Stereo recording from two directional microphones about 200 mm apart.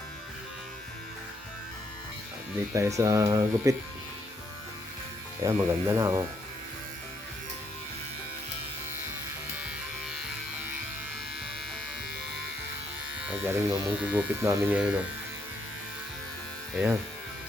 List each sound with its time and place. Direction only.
2.7 s speech: 15° right (ahead or behind)
5.4 s speech: 15° right (ahead or behind)
13.2 s speech: 10° right (ahead or behind)